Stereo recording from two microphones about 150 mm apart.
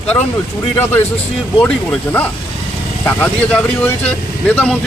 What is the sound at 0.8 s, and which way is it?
Speech, 15° left (ahead or behind).